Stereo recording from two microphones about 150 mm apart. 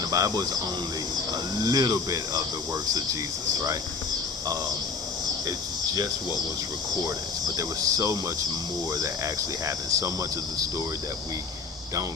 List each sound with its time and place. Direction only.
0.1 s speech: 25° right (ahead or behind)
1.6 s speech: 25° right (ahead or behind)
5.5 s speech: 25° right (ahead or behind)
7.4 s speech: 25° right (ahead or behind)